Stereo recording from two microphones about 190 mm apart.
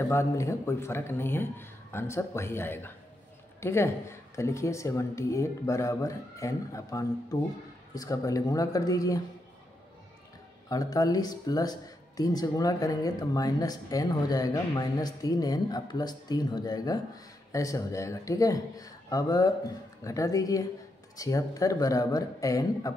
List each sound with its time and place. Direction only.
0.0 s speech: 15° left (ahead or behind)
10.7 s speech: 20° left (ahead or behind)